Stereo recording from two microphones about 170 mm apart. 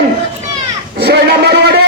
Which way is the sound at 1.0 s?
75° right (ahead or behind).